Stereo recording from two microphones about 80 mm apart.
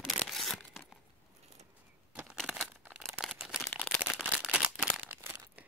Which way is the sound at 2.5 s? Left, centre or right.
Centre.